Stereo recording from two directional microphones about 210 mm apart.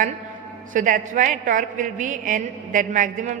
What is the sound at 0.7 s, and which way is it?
A woman's voice, 40° right (ahead or behind).